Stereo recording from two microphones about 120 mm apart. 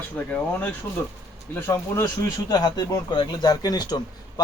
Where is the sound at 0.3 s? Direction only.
15° left (ahead or behind).